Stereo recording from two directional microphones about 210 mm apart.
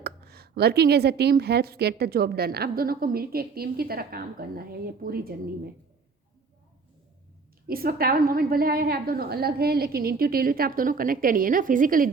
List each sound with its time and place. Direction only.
0.0 s speech: 50° right (ahead or behind)
7.7 s speech: 45° right (ahead or behind)